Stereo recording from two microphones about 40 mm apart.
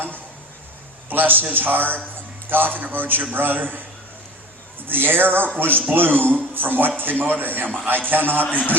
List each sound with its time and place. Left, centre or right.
1.1 s a man's voice: right
4.9 s a man's voice: right
8.4 s a man's voice: left